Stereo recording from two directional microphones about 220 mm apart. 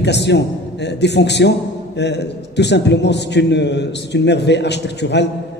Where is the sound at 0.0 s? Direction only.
50° left (ahead or behind).